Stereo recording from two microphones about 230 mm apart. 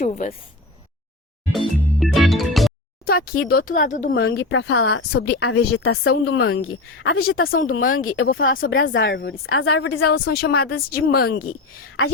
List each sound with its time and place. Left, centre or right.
0.0 s speech: left
1.5 s music: centre
3.1 s speech: left
4.1 s speech: left
5.2 s speech: left
5.5 s speech: left
9.0 s speech: left
9.5 s a woman's voice: left
9.9 s speech: left
10.5 s a woman's voice: left
10.8 s speech: left